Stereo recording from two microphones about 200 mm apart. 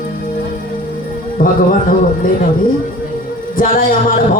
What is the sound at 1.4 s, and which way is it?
Speech, 45° left (ahead or behind).